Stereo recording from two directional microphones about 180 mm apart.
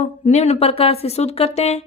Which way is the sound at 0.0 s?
40° left (ahead or behind).